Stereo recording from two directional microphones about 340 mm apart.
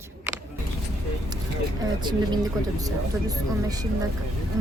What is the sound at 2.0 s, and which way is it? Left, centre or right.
Speech, centre.